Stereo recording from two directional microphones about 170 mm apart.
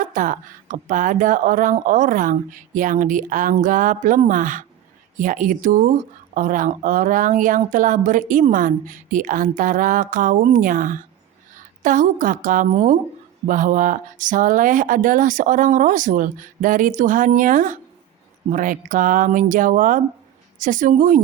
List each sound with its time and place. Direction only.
0.0 s speech: 50° right (ahead or behind)